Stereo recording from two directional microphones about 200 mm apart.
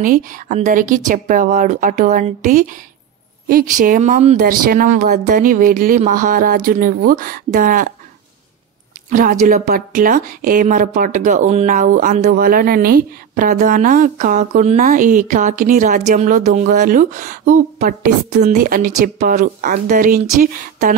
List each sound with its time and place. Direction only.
0.0 s a woman's voice: 40° right (ahead or behind)
9.1 s a woman's voice: 45° right (ahead or behind)